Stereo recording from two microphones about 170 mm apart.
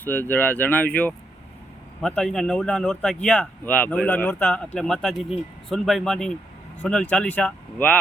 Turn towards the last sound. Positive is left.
turn(degrees=10)  # may be behind; listen again after turning